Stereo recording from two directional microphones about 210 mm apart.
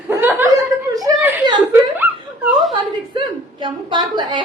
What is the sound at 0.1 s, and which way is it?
Chuckle, 10° right (ahead or behind).